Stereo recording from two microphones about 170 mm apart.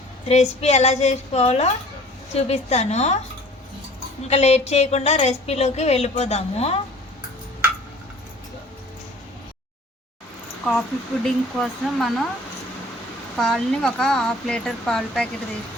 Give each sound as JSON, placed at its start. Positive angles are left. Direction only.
{"t": 0.3, "sound": "a woman's voice", "side_deg": 40}
{"t": 4.3, "sound": "a woman's voice", "side_deg": 40}
{"t": 10.7, "sound": "speech", "side_deg": 5}
{"t": 13.3, "sound": "speech", "side_deg": 0}